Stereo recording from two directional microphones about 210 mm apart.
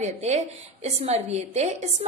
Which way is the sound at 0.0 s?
30° right (ahead or behind).